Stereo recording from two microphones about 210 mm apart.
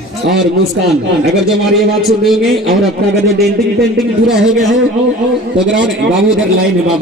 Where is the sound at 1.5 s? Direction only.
Centre (ahead or behind).